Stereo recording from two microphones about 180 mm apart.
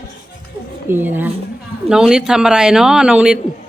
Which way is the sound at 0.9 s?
10° right (ahead or behind).